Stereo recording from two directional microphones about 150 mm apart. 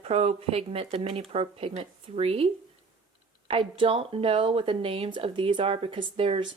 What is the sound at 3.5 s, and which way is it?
Speech, 35° right (ahead or behind).